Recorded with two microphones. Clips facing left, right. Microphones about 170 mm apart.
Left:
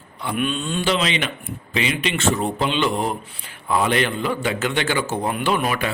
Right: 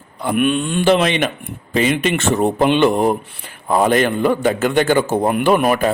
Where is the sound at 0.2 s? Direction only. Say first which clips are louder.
Right 7 dB; 55° right (ahead or behind).